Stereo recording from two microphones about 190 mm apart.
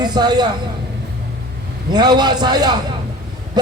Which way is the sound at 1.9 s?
20° right (ahead or behind).